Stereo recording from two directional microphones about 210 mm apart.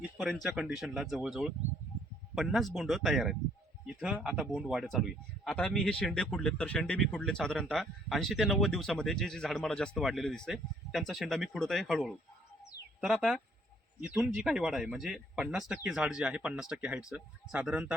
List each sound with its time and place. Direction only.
0.2 s speech: centre (ahead or behind)
12.6 s music: centre (ahead or behind)
14.0 s speech: 5° right (ahead or behind)